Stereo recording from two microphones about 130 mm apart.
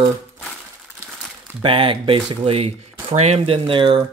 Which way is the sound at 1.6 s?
40° right (ahead or behind).